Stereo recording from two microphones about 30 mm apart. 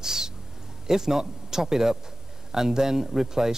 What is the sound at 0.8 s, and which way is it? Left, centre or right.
Speech, centre.